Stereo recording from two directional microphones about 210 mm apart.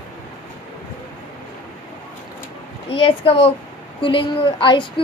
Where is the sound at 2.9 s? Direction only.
25° left (ahead or behind).